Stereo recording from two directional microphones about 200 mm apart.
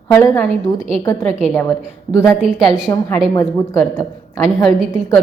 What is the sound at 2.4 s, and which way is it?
Speech, 5° right (ahead or behind).